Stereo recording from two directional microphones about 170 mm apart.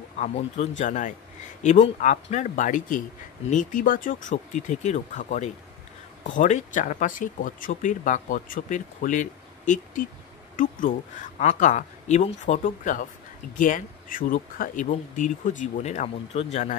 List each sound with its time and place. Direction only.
0.2 s speech: 45° left (ahead or behind)